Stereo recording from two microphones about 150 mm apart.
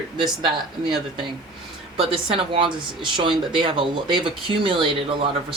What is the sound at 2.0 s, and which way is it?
Speech, 40° right (ahead or behind).